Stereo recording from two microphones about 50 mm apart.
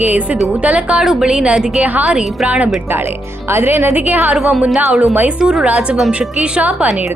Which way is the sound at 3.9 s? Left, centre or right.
Right.